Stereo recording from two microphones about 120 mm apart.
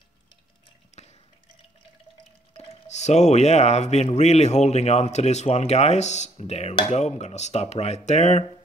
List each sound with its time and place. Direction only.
0.9 s drip: 70° left (ahead or behind)
2.5 s speech: 70° left (ahead or behind)